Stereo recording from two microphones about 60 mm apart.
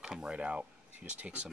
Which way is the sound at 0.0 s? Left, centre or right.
Centre.